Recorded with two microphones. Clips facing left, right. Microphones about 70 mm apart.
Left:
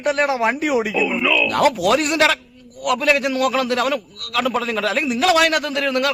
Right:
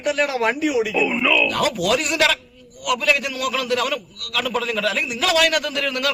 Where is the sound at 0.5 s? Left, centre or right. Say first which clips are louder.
Left 1 dB; left.